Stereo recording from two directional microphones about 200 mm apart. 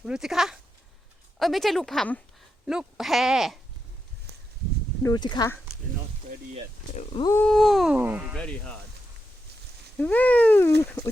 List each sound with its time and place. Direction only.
0.0 s speech: centre (ahead or behind)
5.0 s speech: 20° left (ahead or behind)
6.9 s speech: 25° left (ahead or behind)
7.4 s speech: centre (ahead or behind)
10.0 s speech: 10° left (ahead or behind)